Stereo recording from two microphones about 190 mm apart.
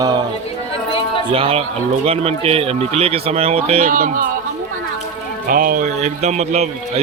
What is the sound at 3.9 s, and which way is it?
Speech, 45° right (ahead or behind).